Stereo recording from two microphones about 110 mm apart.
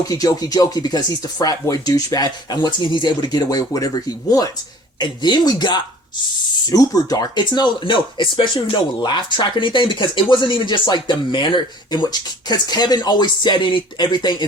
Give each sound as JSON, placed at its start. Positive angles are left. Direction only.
{"t": 0.1, "sound": "speech", "side_deg": 35}